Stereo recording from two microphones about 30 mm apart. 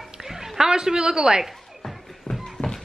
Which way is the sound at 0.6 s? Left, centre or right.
Right.